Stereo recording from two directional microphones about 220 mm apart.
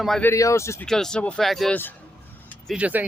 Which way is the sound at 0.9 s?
Centre (ahead or behind).